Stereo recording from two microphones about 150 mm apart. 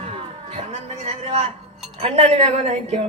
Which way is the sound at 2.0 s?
40° right (ahead or behind).